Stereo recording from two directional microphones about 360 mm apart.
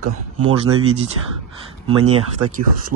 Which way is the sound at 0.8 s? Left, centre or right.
Centre.